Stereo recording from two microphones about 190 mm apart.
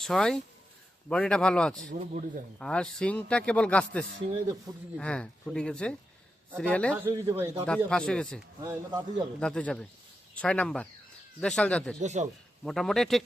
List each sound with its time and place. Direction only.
0.0 s a man's voice: 5° left (ahead or behind)
6.9 s speech: 10° right (ahead or behind)
7.6 s speech: 5° left (ahead or behind)
8.6 s speech: 20° right (ahead or behind)
9.4 s speech: 5° left (ahead or behind)
11.9 s a man's voice: 40° right (ahead or behind)
12.6 s speech: centre (ahead or behind)